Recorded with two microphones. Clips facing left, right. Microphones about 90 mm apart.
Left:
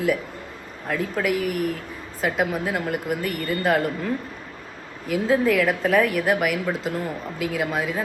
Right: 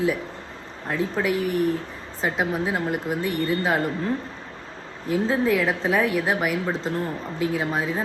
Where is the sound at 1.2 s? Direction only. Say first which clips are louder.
Right 1 dB; 30° right (ahead or behind).